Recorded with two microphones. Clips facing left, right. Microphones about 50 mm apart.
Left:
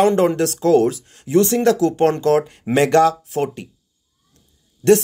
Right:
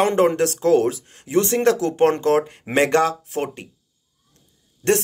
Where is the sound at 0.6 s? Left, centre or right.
Centre.